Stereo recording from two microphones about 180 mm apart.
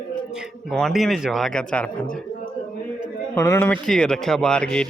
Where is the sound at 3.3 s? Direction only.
15° left (ahead or behind).